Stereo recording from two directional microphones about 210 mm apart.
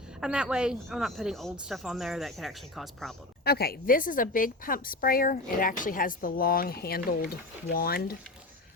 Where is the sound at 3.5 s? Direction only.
45° left (ahead or behind).